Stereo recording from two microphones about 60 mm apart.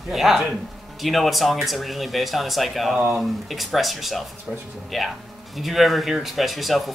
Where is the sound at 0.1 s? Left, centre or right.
Centre.